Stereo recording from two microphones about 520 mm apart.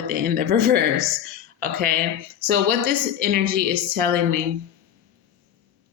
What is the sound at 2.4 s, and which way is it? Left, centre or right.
Speech, centre.